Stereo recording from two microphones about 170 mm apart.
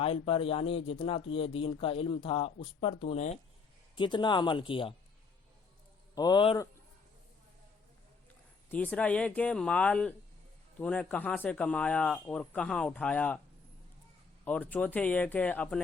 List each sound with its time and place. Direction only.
0.0 s speech: 35° left (ahead or behind)
6.1 s speech: 25° left (ahead or behind)
8.7 s speech: 10° left (ahead or behind)
14.4 s speech: 10° left (ahead or behind)